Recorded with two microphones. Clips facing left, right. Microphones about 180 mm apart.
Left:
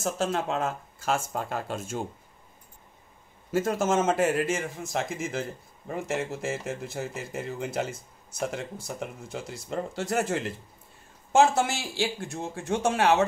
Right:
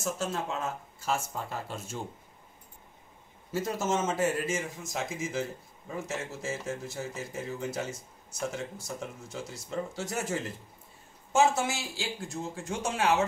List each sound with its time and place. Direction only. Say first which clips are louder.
0.0 s speech: left 5 dB; 70° left (ahead or behind); by 1.6 s 55° left (ahead or behind)
3.5 s speech: left 5 dB; 50° left (ahead or behind)
4.2 s speech: left 4 dB; 65° left (ahead or behind)